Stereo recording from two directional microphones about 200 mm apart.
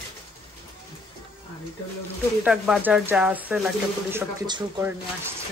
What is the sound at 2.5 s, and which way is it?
Speech, 5° right (ahead or behind).